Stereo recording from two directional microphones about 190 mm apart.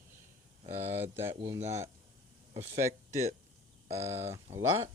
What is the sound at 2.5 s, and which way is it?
Speech, 35° right (ahead or behind).